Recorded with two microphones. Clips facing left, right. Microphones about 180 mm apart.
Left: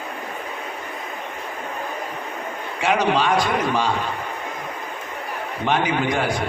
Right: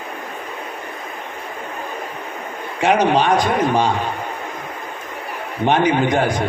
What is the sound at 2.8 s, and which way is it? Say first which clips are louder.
A man's voice: right 4 dB; 20° right (ahead or behind).